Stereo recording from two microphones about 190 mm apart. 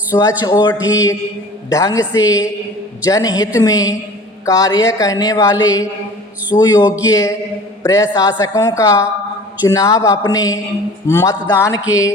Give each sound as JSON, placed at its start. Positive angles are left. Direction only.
{"t": 0.1, "sound": "a woman's voice", "side_deg": 20}